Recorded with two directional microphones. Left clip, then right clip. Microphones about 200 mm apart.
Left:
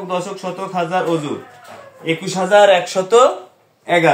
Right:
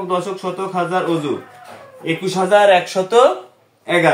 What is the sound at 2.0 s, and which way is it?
A man's voice, 20° left (ahead or behind).